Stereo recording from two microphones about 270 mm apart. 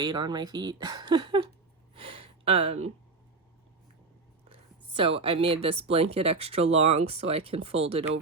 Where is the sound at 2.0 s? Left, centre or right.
Centre.